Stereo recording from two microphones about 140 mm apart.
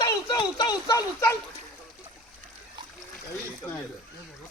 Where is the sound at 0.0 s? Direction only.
30° left (ahead or behind).